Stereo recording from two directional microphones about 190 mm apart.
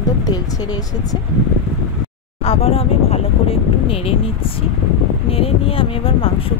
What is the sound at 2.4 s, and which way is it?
Speech, 30° left (ahead or behind).